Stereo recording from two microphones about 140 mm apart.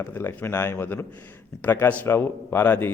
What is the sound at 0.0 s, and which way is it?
A man's voice, 15° left (ahead or behind).